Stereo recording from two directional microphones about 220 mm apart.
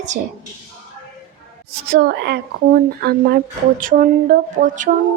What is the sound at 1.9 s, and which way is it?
A woman's voice, 45° right (ahead or behind).